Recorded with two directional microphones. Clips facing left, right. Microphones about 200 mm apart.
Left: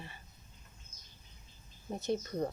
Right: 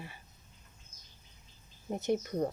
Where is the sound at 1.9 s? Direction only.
15° right (ahead or behind).